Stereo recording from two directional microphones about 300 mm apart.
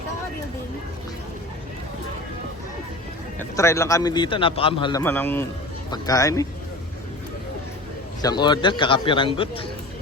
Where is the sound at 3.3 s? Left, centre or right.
Centre.